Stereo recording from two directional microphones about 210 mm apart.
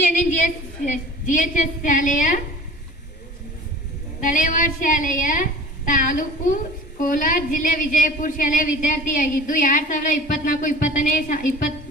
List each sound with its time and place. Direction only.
0.0 s a woman's voice: 35° left (ahead or behind)
4.2 s a woman's voice: 40° left (ahead or behind)